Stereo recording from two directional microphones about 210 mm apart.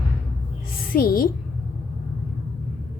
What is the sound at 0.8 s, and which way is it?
Speech, 45° left (ahead or behind).